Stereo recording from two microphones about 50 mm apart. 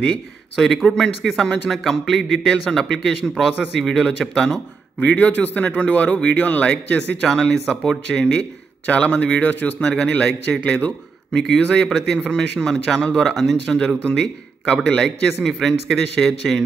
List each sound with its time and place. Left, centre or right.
0.8 s a man's voice: centre
3.8 s speech: centre
5.0 s a man's voice: left
7.2 s a man's voice: centre; by 9.8 s left
9.8 s speech: centre
10.6 s a man's voice: left
11.3 s a man's voice: centre